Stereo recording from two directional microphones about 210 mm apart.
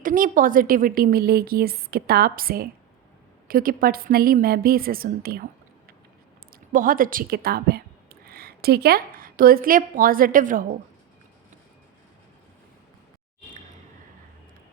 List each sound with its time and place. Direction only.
0.0 s a woman's voice: 40° right (ahead or behind)
6.5 s speech: 40° right (ahead or behind)